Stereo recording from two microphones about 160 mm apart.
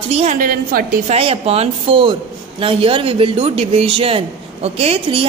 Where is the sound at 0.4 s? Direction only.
60° right (ahead or behind).